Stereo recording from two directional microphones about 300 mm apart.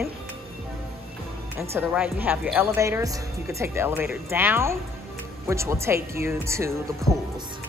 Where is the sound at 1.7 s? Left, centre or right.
Centre.